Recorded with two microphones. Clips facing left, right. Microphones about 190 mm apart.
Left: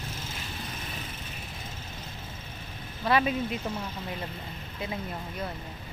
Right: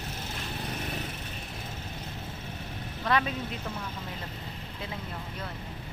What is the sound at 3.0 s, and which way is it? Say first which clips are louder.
Speech: left 3 dB; 10° left (ahead or behind).